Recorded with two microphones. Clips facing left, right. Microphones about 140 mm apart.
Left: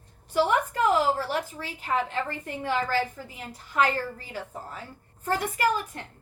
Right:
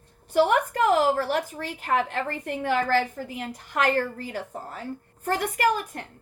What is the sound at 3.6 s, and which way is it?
A woman's voice, 60° right (ahead or behind).